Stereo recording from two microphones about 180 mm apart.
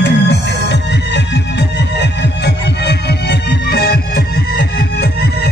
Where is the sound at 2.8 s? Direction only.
65° left (ahead or behind).